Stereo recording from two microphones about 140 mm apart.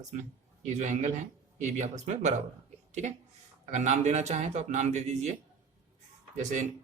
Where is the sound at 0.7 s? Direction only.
55° right (ahead or behind).